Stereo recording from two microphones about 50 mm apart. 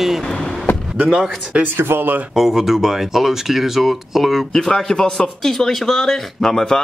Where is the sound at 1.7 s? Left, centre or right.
Right.